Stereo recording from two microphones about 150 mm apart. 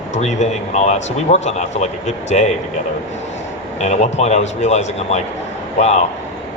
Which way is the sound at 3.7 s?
50° left (ahead or behind).